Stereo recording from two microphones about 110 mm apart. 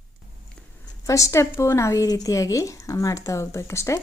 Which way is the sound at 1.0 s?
30° left (ahead or behind).